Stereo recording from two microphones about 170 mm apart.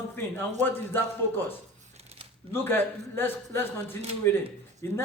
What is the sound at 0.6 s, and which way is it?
Speech, 10° left (ahead or behind).